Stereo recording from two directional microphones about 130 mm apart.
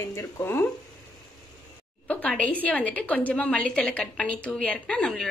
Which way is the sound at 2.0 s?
10° left (ahead or behind).